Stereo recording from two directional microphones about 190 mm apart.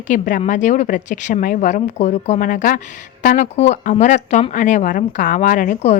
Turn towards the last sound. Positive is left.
turn(degrees=40)  # may be behind; listen again after turning